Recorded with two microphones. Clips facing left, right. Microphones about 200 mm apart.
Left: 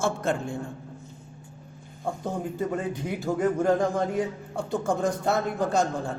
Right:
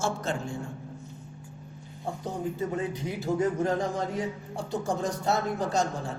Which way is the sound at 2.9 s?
55° left (ahead or behind).